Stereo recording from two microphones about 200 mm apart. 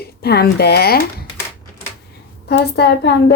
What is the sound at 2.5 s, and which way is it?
Speech, 55° left (ahead or behind).